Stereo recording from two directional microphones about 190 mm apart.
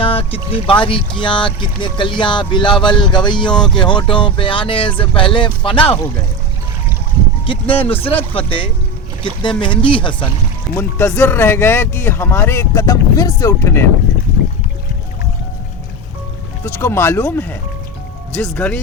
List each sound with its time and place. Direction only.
0.0 s speech: 30° left (ahead or behind)
7.4 s speech: 30° left (ahead or behind)
10.8 s speech: 10° left (ahead or behind)
16.6 s speech: 15° left (ahead or behind)